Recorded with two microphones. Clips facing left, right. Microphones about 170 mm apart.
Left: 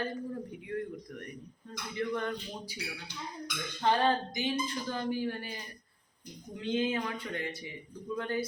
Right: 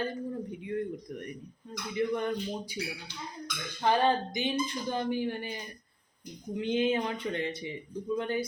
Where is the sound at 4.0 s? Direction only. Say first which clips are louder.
Right 2 dB; 15° right (ahead or behind).